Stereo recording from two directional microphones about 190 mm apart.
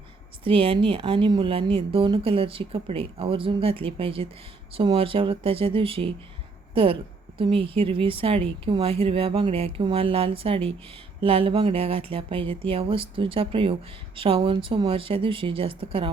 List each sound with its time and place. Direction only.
0.4 s a woman's voice: 30° right (ahead or behind)